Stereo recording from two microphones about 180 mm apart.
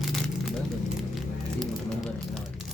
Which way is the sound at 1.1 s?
Centre (ahead or behind).